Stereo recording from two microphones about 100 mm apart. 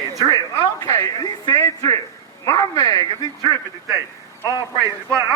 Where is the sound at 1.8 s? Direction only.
40° left (ahead or behind).